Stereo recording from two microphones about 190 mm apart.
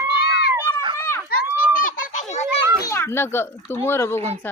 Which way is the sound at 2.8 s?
15° left (ahead or behind).